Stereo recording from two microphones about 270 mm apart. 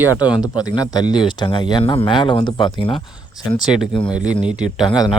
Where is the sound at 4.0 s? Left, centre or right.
Centre.